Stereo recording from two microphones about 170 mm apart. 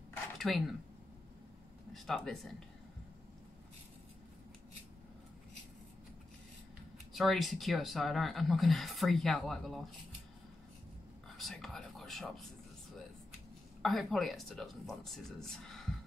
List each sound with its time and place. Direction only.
0.4 s speech: centre (ahead or behind)
2.0 s speech: centre (ahead or behind)
7.2 s speech: centre (ahead or behind)
11.2 s speech: centre (ahead or behind)
13.8 s speech: centre (ahead or behind)